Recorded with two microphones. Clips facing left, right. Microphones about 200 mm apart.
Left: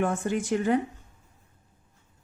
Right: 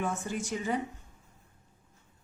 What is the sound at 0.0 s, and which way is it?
Speech, 65° left (ahead or behind).